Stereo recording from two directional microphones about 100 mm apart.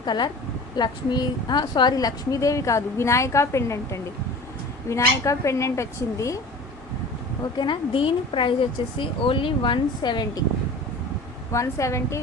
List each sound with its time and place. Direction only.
0.0 s a woman's voice: 45° left (ahead or behind)
7.6 s speech: 55° left (ahead or behind)
11.5 s a woman's voice: 30° left (ahead or behind)